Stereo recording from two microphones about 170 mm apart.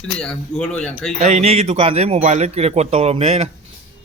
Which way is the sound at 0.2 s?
5° left (ahead or behind).